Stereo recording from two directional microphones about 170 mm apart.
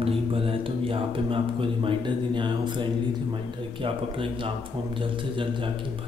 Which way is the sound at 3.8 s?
30° right (ahead or behind).